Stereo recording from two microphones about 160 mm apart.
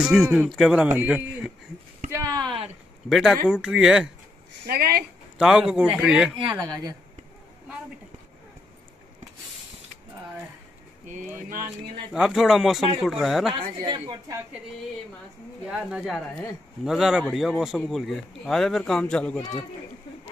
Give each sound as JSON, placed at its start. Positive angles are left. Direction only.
{"t": 0.0, "sound": "speech", "side_deg": -5}
{"t": 2.0, "sound": "a sound", "side_deg": -20}
{"t": 3.1, "sound": "speech", "side_deg": 0}
{"t": 4.6, "sound": "speech", "side_deg": -70}
{"t": 5.4, "sound": "speech", "side_deg": -5}
{"t": 12.1, "sound": "speech", "side_deg": -5}
{"t": 13.7, "sound": "speech", "side_deg": -25}
{"t": 15.6, "sound": "speech", "side_deg": -5}